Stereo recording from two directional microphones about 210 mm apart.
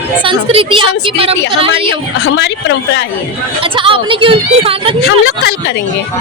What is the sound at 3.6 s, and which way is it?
Speech, 25° right (ahead or behind).